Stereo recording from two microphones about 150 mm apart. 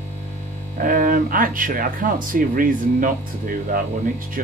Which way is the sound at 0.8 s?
65° right (ahead or behind).